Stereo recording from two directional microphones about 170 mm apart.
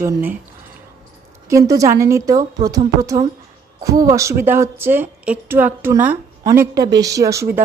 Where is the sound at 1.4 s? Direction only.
20° right (ahead or behind).